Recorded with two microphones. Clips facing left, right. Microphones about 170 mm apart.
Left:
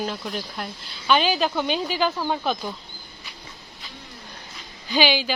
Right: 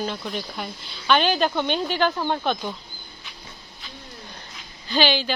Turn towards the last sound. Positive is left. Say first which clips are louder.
# even
turn(degrees=10)  # may be behind; listen again after turning